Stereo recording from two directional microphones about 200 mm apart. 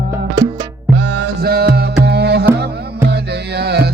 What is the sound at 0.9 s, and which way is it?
Music, 65° right (ahead or behind).